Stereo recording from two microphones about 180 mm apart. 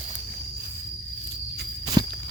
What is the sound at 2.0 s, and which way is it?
Walk, 20° right (ahead or behind).